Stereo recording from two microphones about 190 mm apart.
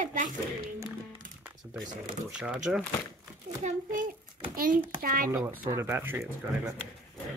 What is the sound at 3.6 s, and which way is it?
A child's voice, 45° right (ahead or behind).